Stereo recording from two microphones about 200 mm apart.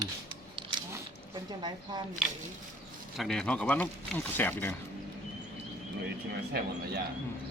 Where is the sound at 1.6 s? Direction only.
20° right (ahead or behind).